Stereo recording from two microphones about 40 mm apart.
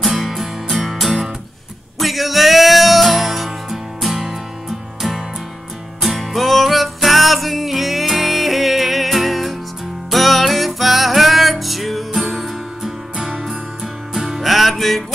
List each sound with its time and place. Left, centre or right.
0.0 s music: centre